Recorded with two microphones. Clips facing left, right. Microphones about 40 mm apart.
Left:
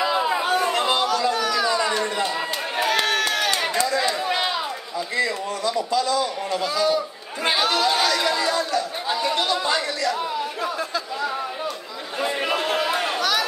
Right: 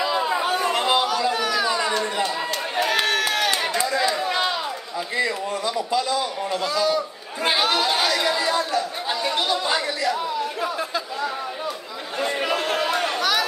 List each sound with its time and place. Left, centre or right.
0.0 s chatter: centre
0.9 s a sound: centre
2.8 s run: centre
3.7 s chatter: centre
4.0 s run: centre
5.1 s a man's voice: centre
6.6 s speech: centre
7.4 s speech: centre
12.2 s chatter: centre